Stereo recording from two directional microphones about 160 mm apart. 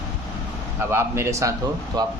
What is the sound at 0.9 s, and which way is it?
Speech, 15° right (ahead or behind).